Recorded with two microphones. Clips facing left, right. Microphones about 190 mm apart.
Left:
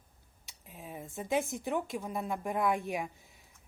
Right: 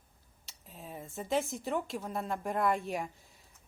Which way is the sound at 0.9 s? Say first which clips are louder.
Left 1 dB; centre (ahead or behind).